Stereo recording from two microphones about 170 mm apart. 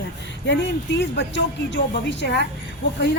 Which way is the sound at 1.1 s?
90° left.